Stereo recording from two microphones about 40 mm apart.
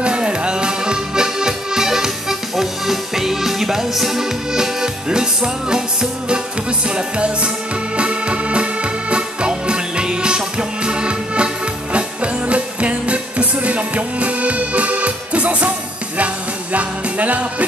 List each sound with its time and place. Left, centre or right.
0.0 s accordion: right
6.9 s music: right
16.7 s music: right